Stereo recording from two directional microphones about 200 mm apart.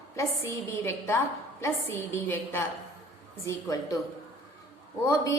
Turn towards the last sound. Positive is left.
turn(degrees=15)  # may be behind; listen again after turning